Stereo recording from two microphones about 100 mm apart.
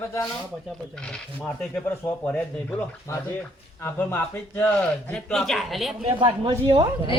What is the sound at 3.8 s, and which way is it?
Speech, 20° left (ahead or behind).